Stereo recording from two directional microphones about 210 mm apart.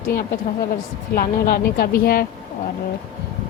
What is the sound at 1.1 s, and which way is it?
Speech, 45° left (ahead or behind).